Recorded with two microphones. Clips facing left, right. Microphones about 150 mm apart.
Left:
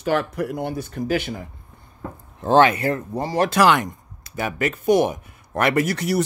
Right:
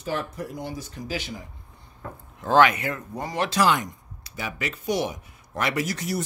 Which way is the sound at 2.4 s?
30° left (ahead or behind).